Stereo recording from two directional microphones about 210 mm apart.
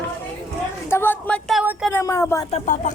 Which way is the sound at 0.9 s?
10° left (ahead or behind).